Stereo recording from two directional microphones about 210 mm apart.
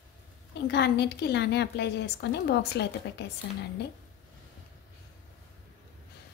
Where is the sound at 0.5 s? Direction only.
50° left (ahead or behind).